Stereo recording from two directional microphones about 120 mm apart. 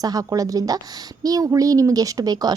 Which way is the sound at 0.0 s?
30° right (ahead or behind).